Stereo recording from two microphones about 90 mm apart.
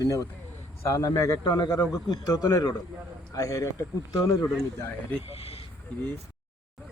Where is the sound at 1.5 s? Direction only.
45° left (ahead or behind).